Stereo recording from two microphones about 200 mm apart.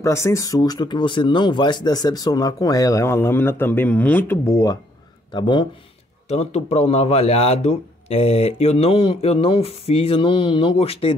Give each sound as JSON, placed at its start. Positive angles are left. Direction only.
{"t": 0.0, "sound": "speech", "side_deg": 15}